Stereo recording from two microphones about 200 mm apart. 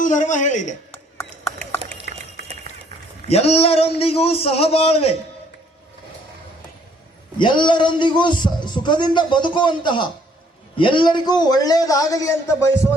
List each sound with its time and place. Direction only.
0.0 s speech: 40° left (ahead or behind)
2.1 s a sound: 55° left (ahead or behind)
3.2 s a man's voice: 30° left (ahead or behind)
7.3 s a man's voice: 25° left (ahead or behind)